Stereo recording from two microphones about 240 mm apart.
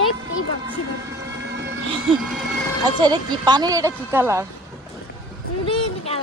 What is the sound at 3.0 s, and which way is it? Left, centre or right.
Speech, centre.